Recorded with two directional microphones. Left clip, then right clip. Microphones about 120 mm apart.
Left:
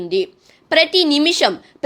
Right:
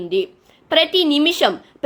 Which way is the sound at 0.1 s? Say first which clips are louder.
Left 1 dB; 40° left (ahead or behind).